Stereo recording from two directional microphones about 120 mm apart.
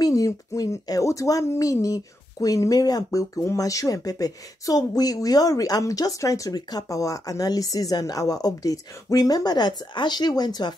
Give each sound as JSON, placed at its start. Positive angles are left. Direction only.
{"t": 0.0, "sound": "speech", "side_deg": 30}